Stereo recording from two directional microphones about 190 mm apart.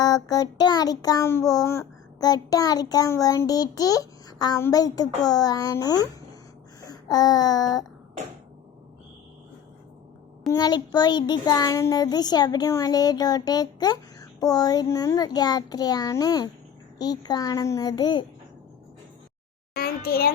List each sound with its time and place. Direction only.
0.0 s child singing: 20° left (ahead or behind)
6.8 s a sound: 20° left (ahead or behind)
10.5 s child singing: 20° left (ahead or behind)
19.7 s a child's voice: 50° left (ahead or behind)